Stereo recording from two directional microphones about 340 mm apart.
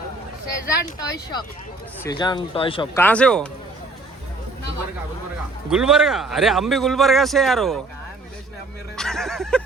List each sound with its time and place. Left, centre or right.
0.5 s a man's voice: centre
5.7 s speech: centre
9.0 s a sound: centre